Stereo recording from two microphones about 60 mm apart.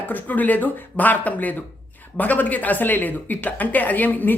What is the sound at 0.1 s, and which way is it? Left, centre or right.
A man's voice, left.